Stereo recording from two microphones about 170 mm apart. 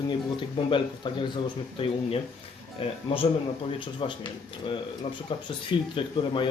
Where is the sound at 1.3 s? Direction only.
35° left (ahead or behind).